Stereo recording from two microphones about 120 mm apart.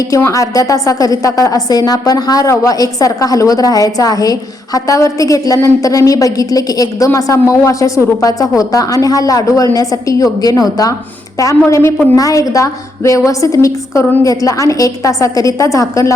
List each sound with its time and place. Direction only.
0.3 s a woman's voice: 25° left (ahead or behind)